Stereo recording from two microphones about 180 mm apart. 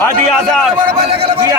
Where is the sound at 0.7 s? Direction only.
35° right (ahead or behind).